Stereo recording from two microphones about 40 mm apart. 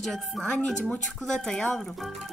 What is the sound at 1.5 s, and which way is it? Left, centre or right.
Speech, centre.